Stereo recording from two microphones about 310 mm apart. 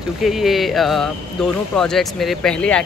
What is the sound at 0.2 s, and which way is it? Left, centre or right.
Speech, centre.